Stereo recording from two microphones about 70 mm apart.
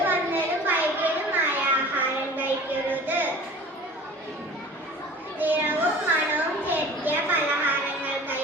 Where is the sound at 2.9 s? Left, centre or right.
Right.